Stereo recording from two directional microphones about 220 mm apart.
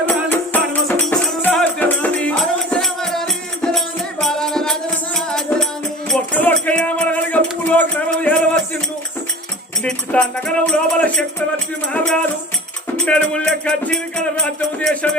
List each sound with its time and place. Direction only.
0.0 s music: 10° left (ahead or behind)
9.8 s music: 5° left (ahead or behind)